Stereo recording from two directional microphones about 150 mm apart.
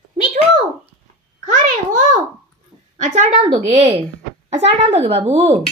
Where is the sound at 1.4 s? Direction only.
55° right (ahead or behind).